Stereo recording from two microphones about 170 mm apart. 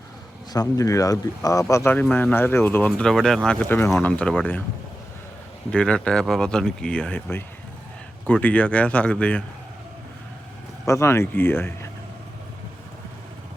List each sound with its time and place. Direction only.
0.5 s speech: 20° left (ahead or behind)
5.7 s speech: 5° left (ahead or behind)
10.8 s speech: 15° left (ahead or behind)